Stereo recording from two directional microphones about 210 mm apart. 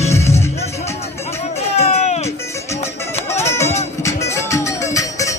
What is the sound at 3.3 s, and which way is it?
Music, 15° left (ahead or behind).